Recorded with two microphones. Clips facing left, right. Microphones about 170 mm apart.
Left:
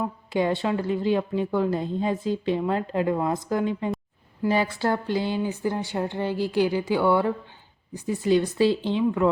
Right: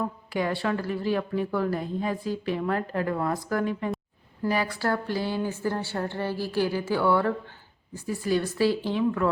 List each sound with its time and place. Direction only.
0.3 s a woman's voice: 20° left (ahead or behind)